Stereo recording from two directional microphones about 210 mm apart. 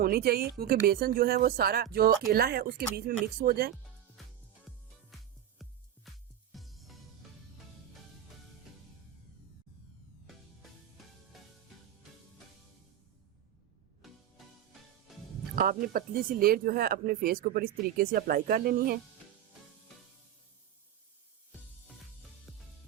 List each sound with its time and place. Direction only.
0.0 s speech: 45° right (ahead or behind)
4.7 s music: centre (ahead or behind)
11.3 s music: centre (ahead or behind)
15.5 s speech: 45° right (ahead or behind)
22.5 s music: centre (ahead or behind)